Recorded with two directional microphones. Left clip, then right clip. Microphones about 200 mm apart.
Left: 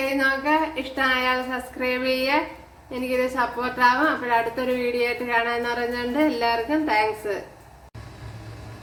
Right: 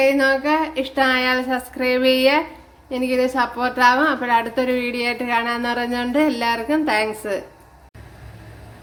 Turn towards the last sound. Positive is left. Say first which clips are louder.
# right 2 dB
turn(degrees=-50)  # may be behind; listen again after turning